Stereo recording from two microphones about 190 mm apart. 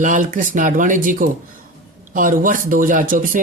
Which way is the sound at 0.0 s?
40° right (ahead or behind).